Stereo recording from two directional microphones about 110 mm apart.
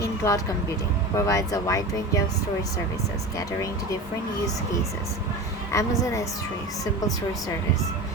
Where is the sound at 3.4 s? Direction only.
30° left (ahead or behind).